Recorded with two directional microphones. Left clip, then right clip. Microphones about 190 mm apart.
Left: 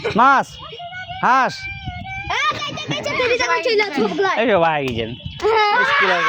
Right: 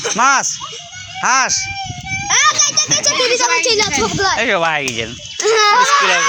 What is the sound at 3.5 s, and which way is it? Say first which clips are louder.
A child's voice: right 3 dB; 35° left (ahead or behind).